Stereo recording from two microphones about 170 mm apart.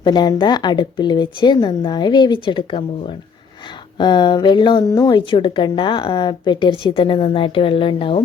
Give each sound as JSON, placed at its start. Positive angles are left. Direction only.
{"t": 0.0, "sound": "a woman's voice", "side_deg": 25}